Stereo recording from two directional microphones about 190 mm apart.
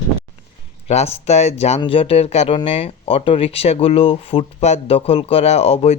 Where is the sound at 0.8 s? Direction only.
35° left (ahead or behind).